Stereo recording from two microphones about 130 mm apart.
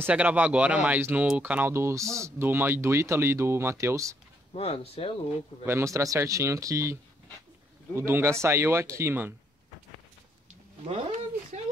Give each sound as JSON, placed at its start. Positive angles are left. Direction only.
{"t": 0.0, "sound": "speech", "side_deg": -10}
{"t": 4.6, "sound": "speech", "side_deg": 50}
{"t": 5.7, "sound": "speech", "side_deg": -20}
{"t": 10.5, "sound": "a sound", "side_deg": -60}